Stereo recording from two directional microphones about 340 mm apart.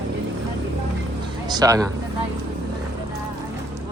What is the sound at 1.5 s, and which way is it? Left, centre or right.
Speech, centre.